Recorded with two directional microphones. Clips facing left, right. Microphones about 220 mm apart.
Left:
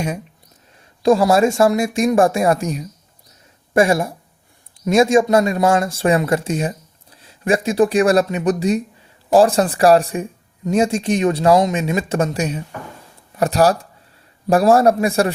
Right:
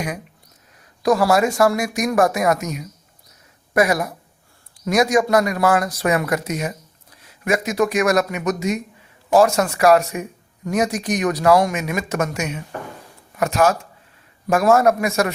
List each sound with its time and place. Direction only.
1.0 s speech: 25° left (ahead or behind)